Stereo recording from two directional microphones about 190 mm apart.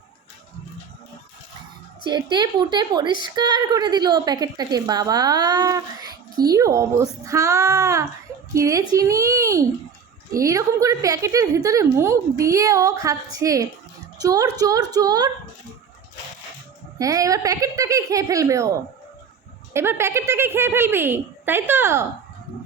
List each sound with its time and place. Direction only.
2.0 s a woman's voice: 25° right (ahead or behind)
17.0 s a woman's voice: 15° right (ahead or behind)
19.7 s a woman's voice: 15° right (ahead or behind)